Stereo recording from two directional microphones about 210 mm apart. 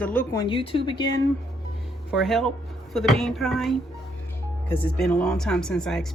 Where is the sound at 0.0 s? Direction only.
5° left (ahead or behind).